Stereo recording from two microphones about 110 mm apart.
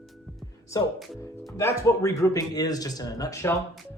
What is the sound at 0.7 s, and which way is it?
Speech, 30° left (ahead or behind).